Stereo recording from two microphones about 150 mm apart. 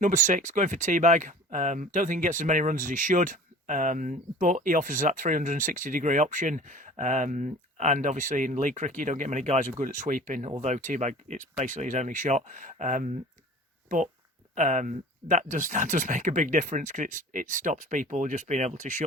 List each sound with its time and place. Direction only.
0.0 s speech: 55° right (ahead or behind)